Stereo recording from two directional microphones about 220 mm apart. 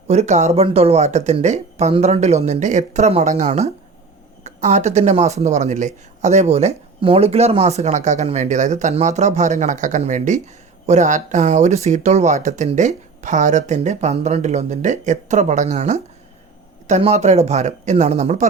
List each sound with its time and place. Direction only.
0.1 s speech: 30° right (ahead or behind)